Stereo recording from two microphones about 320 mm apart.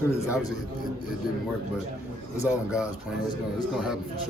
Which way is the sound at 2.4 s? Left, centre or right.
Centre.